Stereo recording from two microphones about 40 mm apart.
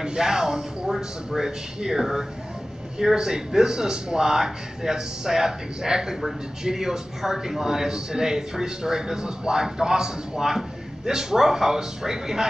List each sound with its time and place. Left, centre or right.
0.0 s a man's voice: centre